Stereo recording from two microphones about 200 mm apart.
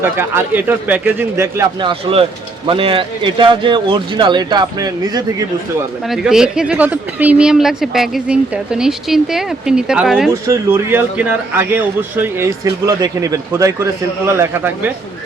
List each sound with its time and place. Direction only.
0.0 s a man's voice: 10° right (ahead or behind)
6.1 s speech: 5° right (ahead or behind)
10.4 s a man's voice: 10° right (ahead or behind)